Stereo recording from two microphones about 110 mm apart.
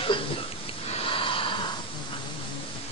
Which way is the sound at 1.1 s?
50° left (ahead or behind).